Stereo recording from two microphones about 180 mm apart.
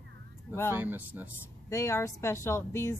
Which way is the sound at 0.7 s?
10° right (ahead or behind).